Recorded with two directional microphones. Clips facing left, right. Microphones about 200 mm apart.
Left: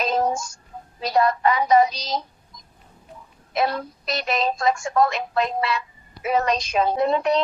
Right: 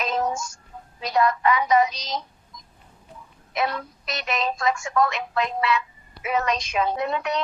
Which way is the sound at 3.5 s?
35° left (ahead or behind).